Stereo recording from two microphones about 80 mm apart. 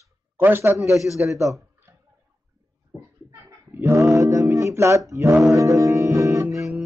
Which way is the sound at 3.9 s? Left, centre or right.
Right.